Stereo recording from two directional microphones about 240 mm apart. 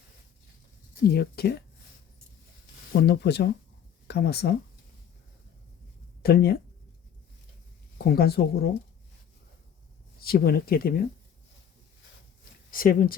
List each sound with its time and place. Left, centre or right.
1.0 s speech: left
2.9 s speech: left
6.2 s speech: left
7.9 s speech: left
10.2 s speech: left
12.7 s speech: left